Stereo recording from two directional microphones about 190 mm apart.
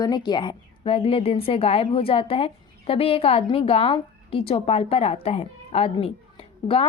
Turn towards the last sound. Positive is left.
turn(degrees=30)  # may be behind; listen again after turning